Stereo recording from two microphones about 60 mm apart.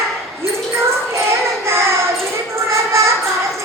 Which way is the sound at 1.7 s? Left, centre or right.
Right.